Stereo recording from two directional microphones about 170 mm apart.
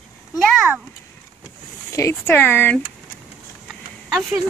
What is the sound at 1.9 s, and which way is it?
Speech, 15° left (ahead or behind).